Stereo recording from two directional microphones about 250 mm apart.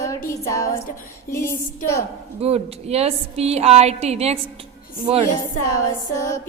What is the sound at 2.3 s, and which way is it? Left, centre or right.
A woman's voice, right.